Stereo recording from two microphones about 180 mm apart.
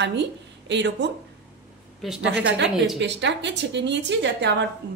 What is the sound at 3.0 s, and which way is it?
A woman's voice, 75° right (ahead or behind).